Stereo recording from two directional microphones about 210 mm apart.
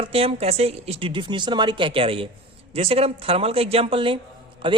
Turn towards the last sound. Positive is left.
turn(degrees=-25)  # may be behind; listen again after turning